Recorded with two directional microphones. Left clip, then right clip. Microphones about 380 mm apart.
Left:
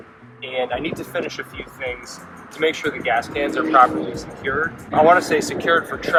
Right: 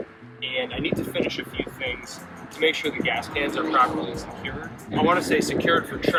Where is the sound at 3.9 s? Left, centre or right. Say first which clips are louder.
Left 4 dB; centre.